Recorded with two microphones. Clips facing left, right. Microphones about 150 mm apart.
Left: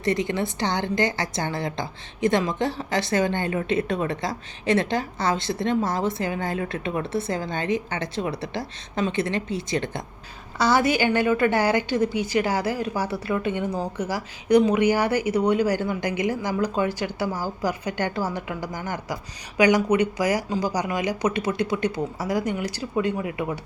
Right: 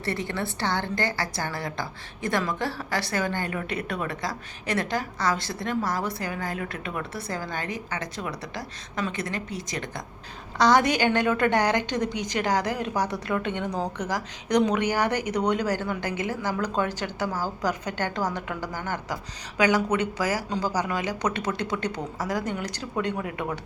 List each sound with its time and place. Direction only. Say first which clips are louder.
0.0 s a woman's voice: left 5 dB; 15° left (ahead or behind)
10.6 s a woman's voice: even; 5° left (ahead or behind)